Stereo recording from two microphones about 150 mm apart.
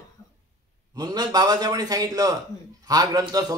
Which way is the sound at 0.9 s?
25° right (ahead or behind).